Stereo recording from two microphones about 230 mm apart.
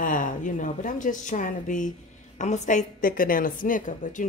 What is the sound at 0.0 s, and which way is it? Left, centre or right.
A woman's voice, left.